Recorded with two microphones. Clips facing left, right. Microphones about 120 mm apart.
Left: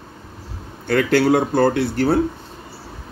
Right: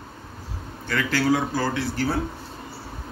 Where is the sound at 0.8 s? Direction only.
60° left (ahead or behind).